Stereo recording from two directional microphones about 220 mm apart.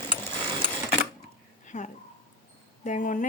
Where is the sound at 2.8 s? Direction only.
35° left (ahead or behind).